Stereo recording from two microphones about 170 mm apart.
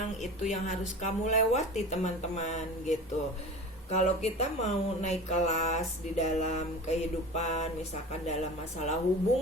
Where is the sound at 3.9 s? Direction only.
40° left (ahead or behind).